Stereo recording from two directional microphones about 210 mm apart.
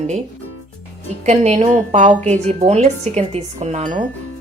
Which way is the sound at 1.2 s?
30° right (ahead or behind).